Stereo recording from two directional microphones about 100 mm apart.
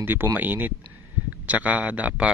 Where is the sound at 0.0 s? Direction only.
20° right (ahead or behind).